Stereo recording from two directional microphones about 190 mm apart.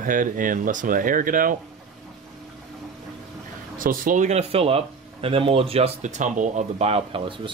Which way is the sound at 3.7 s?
45° right (ahead or behind).